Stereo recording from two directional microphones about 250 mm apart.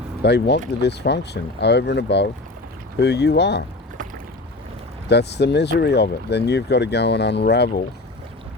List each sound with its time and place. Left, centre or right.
0.2 s speech: left
5.0 s speech: left